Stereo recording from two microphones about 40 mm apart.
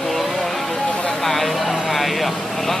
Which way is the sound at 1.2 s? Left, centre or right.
Centre.